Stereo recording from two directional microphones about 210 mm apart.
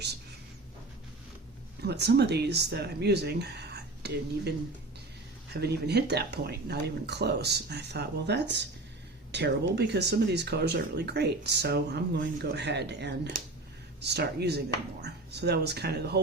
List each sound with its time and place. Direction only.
1.8 s speech: 50° right (ahead or behind)
5.5 s speech: 50° right (ahead or behind)